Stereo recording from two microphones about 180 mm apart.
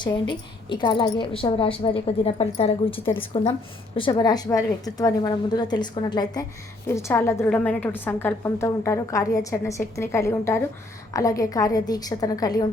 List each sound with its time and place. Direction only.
0.0 s a woman's voice: 25° left (ahead or behind)
6.8 s a woman's voice: 15° left (ahead or behind)